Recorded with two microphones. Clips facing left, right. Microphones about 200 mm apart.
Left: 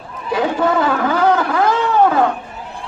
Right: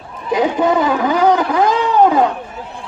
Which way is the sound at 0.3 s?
15° right (ahead or behind).